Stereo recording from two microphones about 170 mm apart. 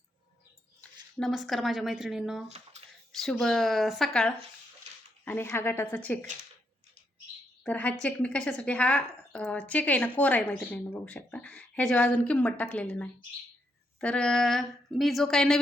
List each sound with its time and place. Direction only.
0.8 s a woman's voice: centre (ahead or behind)
4.9 s a sound: 40° right (ahead or behind)
5.2 s a woman's voice: 10° left (ahead or behind)
7.6 s a woman's voice: 5° left (ahead or behind)